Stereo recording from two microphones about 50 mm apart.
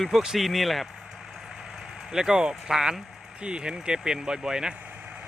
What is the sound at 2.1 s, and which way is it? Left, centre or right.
Speech, centre.